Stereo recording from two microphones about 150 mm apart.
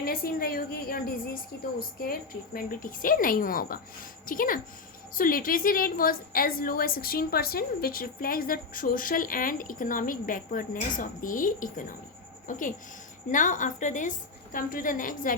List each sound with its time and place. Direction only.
0.0 s a woman's voice: 85° left; by 15.4 s 65° left (ahead or behind)